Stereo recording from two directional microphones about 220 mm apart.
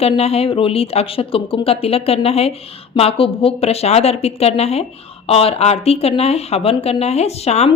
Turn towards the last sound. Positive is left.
turn(degrees=30)  # may be behind; listen again after turning